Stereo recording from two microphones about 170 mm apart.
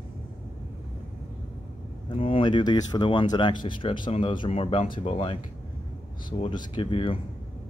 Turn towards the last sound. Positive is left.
turn(degrees=30)  # may be behind; listen again after turning